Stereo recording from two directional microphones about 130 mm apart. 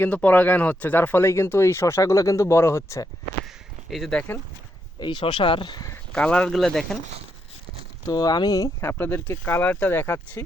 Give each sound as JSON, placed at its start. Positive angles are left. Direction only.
{"t": 0.0, "sound": "speech", "side_deg": 10}
{"t": 3.4, "sound": "a sound", "side_deg": 0}
{"t": 4.9, "sound": "speech", "side_deg": 35}
{"t": 6.1, "sound": "speech", "side_deg": 10}
{"t": 8.0, "sound": "speech", "side_deg": 30}